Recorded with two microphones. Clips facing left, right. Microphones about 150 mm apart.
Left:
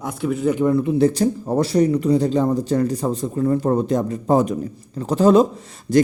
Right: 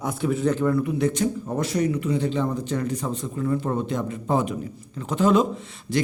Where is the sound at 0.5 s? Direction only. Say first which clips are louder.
Left 5 dB; 20° left (ahead or behind).